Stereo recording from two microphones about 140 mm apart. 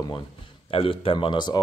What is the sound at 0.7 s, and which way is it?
Speech, 40° left (ahead or behind).